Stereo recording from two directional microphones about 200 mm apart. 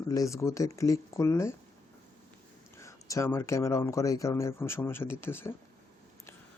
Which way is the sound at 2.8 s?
15° left (ahead or behind).